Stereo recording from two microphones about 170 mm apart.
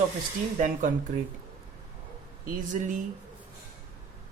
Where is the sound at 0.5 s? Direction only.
50° right (ahead or behind).